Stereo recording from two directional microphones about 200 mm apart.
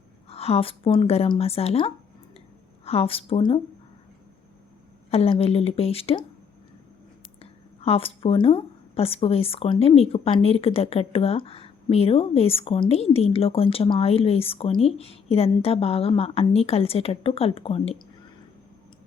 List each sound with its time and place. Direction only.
0.3 s a woman's voice: 30° left (ahead or behind)
5.1 s a woman's voice: 30° left (ahead or behind)
7.8 s a woman's voice: 30° left (ahead or behind)